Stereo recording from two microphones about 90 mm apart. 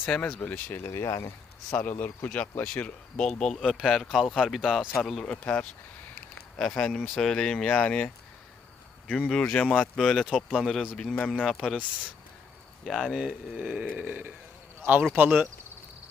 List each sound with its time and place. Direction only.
0.1 s speech: 15° left (ahead or behind)
1.7 s speech: 20° left (ahead or behind)
10.3 s speech: 5° right (ahead or behind)
10.9 s speech: 10° left (ahead or behind)
12.8 s speech: centre (ahead or behind)
14.0 s a sound: 20° right (ahead or behind)
15.1 s speech: 15° right (ahead or behind)